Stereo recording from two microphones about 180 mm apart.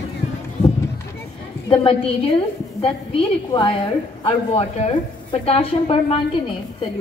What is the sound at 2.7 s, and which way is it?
A woman's voice, 30° left (ahead or behind).